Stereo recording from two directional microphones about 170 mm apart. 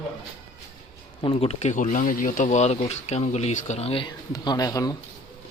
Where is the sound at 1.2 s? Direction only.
30° left (ahead or behind).